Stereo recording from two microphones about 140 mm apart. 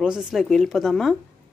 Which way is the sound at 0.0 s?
5° right (ahead or behind).